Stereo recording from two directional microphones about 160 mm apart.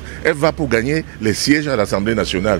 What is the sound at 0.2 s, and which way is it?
A man's voice, 5° right (ahead or behind).